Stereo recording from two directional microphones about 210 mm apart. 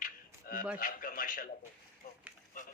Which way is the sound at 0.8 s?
40° left (ahead or behind).